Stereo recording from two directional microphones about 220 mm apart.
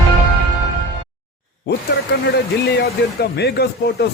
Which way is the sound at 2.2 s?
50° left (ahead or behind).